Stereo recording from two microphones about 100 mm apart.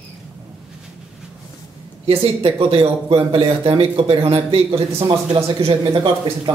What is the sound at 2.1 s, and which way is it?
Speech, 75° right (ahead or behind).